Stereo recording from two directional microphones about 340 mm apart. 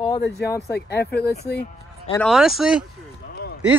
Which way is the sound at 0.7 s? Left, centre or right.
Left.